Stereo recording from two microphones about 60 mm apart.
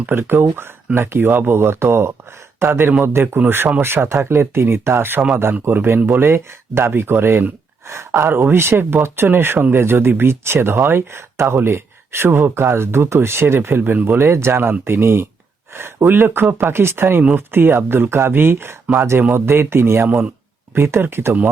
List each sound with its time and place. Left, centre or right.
0.0 s speech: right
14.2 s speech: right
18.9 s speech: right
20.1 s speech: right
20.7 s speech: right